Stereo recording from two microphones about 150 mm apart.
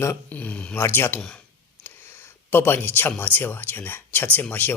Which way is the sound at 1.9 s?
15° left (ahead or behind).